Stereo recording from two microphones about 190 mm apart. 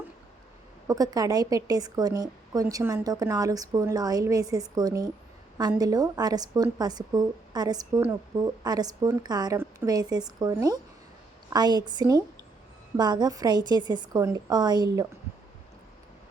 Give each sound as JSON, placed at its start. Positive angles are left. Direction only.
{"t": 0.9, "sound": "a woman's voice", "side_deg": -20}